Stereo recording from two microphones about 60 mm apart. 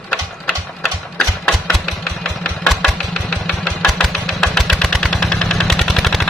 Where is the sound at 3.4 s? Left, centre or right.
Centre.